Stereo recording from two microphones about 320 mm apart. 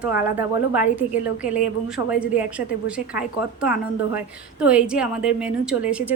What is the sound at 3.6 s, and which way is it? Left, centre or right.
A woman's voice, centre.